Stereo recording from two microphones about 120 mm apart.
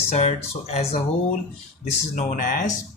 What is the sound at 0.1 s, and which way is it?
Speech, 65° left (ahead or behind).